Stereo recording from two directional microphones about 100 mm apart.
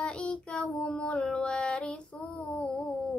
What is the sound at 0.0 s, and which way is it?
Child singing, 10° left (ahead or behind).